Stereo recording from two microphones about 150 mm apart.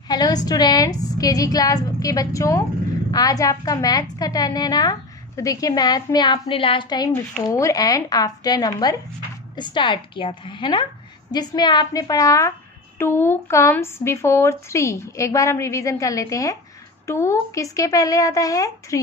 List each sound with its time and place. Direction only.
0.1 s a woman's voice: 25° left (ahead or behind)